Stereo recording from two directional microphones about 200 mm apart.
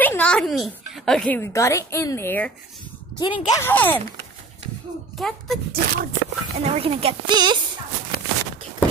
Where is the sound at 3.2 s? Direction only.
25° left (ahead or behind).